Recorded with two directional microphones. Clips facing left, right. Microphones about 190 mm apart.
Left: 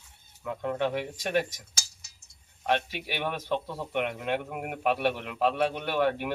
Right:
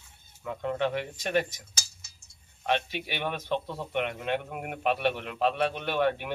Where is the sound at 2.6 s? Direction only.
10° left (ahead or behind).